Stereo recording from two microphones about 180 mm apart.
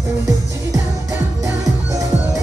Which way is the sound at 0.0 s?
15° right (ahead or behind).